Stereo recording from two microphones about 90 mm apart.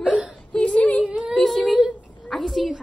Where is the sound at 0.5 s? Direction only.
15° left (ahead or behind).